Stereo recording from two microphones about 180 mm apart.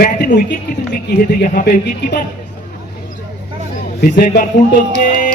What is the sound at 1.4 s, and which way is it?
Speech, 55° left (ahead or behind).